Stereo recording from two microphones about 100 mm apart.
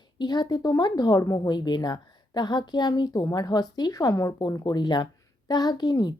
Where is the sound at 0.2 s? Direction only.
45° left (ahead or behind).